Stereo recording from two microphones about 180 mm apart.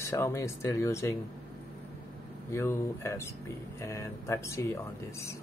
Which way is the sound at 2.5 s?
15° left (ahead or behind).